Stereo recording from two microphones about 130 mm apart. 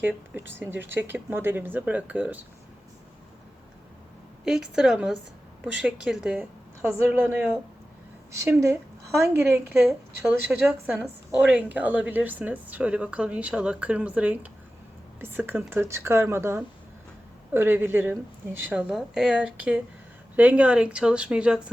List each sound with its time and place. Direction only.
0.0 s a woman's voice: 15° right (ahead or behind)
4.4 s a woman's voice: 5° right (ahead or behind)
18.7 s a woman's voice: 5° right (ahead or behind)